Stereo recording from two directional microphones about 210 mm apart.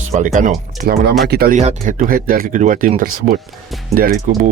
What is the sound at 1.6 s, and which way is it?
Speech, 35° right (ahead or behind).